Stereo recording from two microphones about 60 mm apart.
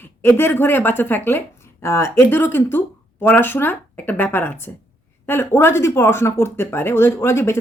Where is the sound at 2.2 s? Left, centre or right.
Left.